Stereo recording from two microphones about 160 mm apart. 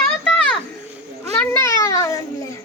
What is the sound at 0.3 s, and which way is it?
Children playing, 5° left (ahead or behind).